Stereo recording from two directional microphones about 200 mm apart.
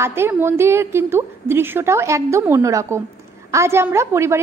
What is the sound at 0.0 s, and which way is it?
A woman's voice, 10° right (ahead or behind).